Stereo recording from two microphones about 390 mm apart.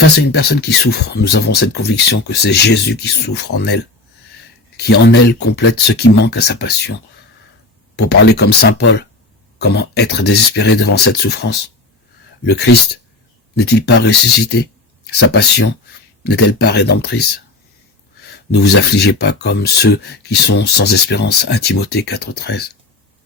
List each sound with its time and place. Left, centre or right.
0.0 s speech: left
4.8 s speech: left
7.9 s speech: left
13.7 s speech: left
18.5 s speech: left